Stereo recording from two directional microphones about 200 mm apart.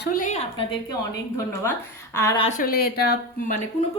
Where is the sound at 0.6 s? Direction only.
25° left (ahead or behind).